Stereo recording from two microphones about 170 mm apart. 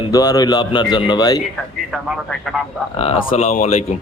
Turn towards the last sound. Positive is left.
turn(degrees=45)  # may be behind; listen again after turning